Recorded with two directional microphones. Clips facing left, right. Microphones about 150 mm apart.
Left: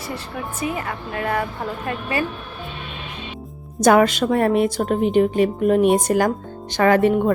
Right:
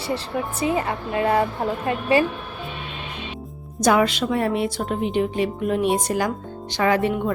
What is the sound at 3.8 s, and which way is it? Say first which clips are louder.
A woman's voice: left 4 dB; 50° left (ahead or behind).